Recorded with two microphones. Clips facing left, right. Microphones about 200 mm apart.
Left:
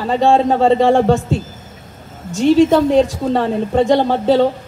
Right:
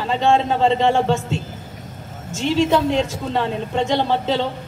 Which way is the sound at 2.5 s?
40° left (ahead or behind).